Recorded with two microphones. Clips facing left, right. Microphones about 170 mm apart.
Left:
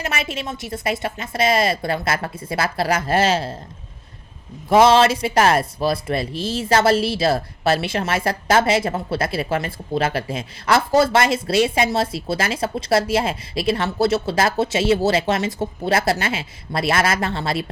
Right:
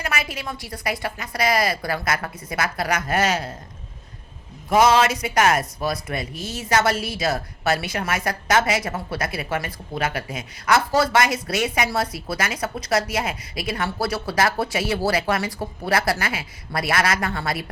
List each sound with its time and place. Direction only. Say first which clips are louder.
0.0 s speech: left 2 dB; 25° left (ahead or behind)
4.7 s speech: left 4 dB; 30° left (ahead or behind)